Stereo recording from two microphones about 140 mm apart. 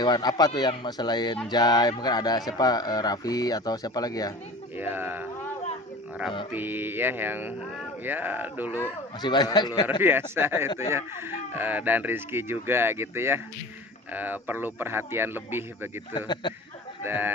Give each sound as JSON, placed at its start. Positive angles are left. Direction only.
{"t": 0.0, "sound": "speech", "side_deg": 30}
{"t": 4.8, "sound": "speech", "side_deg": -15}
{"t": 6.5, "sound": "speech", "side_deg": -15}
{"t": 9.2, "sound": "speech", "side_deg": 30}
{"t": 10.0, "sound": "speech", "side_deg": -15}
{"t": 16.1, "sound": "speech", "side_deg": 30}
{"t": 17.0, "sound": "speech", "side_deg": -15}